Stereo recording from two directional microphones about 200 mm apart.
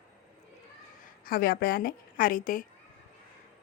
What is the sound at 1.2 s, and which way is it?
A woman's voice, 45° left (ahead or behind).